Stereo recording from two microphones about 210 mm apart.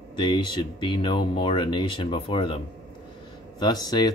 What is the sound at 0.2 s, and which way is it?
Speech, 20° left (ahead or behind).